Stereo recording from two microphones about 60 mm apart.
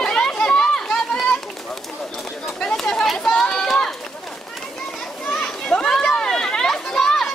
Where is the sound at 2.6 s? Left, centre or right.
Centre.